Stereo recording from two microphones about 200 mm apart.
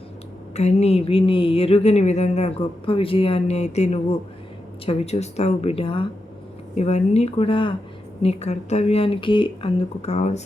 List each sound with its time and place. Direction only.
0.5 s speech: 35° left (ahead or behind)